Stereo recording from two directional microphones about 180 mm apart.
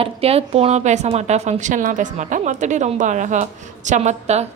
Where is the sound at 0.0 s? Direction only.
35° right (ahead or behind).